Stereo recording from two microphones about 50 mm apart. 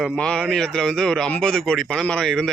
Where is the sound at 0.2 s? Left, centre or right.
Centre.